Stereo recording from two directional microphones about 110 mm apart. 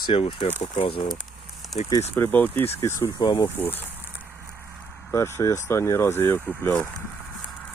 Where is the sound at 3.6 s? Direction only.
15° left (ahead or behind).